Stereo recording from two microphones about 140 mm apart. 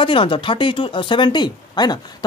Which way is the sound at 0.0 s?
40° left (ahead or behind).